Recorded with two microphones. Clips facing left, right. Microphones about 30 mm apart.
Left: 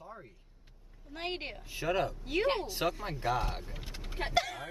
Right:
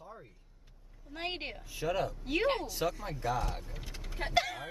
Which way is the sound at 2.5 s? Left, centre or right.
Left.